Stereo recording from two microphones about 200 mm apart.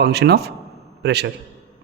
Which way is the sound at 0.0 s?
55° right (ahead or behind).